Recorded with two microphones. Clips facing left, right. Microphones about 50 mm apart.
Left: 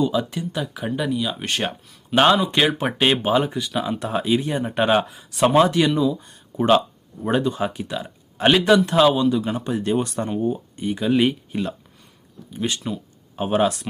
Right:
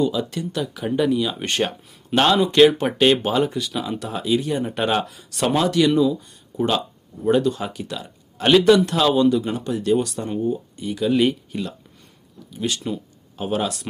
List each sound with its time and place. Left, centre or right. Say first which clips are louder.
0.0 s speech: even; centre
0.9 s speech: right 5 dB; centre
2.1 s speech: right 1 dB; centre
4.0 s speech: even; left; by 9.6 s centre
9.6 s speech: right 2 dB; left
11.1 s speech: even; centre
12.5 s speech: even; left